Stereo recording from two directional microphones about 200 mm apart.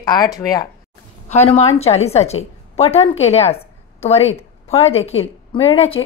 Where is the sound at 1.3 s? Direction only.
30° left (ahead or behind).